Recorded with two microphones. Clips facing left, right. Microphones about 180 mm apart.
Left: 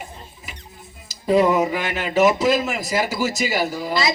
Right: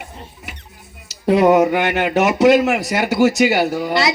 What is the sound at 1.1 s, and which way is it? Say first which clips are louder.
Speech: right 4 dB; 70° right (ahead or behind).